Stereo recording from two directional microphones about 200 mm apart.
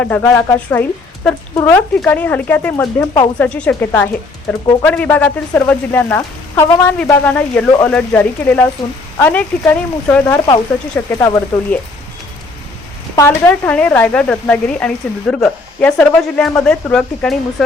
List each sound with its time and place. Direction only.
0.0 s speech: 10° left (ahead or behind)
4.6 s speech: 20° left (ahead or behind)
4.9 s speech: 5° left (ahead or behind)
13.1 s speech: 10° left (ahead or behind)